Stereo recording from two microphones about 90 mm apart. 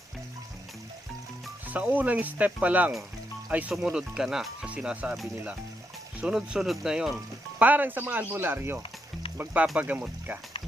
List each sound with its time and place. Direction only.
1.7 s speech: 15° right (ahead or behind)
6.2 s speech: 5° right (ahead or behind)
7.5 s speech: 20° right (ahead or behind)